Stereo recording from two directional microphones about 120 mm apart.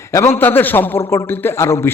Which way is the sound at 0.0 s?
25° left (ahead or behind).